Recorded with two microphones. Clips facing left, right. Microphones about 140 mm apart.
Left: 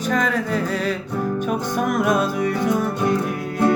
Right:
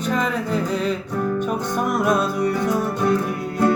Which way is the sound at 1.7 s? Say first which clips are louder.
Even; 50° left (ahead or behind).